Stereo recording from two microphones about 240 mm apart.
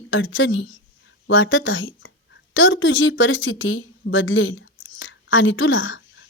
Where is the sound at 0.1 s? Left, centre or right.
Left.